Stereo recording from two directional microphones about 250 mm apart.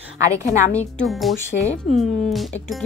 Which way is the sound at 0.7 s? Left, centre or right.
Centre.